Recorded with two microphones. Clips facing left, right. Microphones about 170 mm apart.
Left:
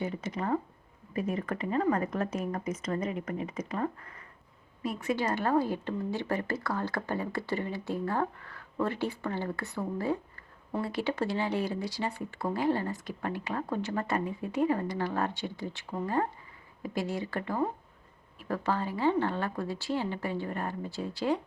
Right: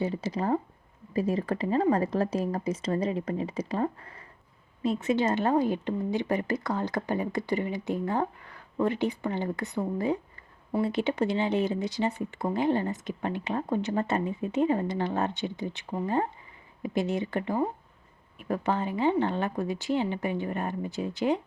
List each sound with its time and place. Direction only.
0.0 s speech: 30° right (ahead or behind)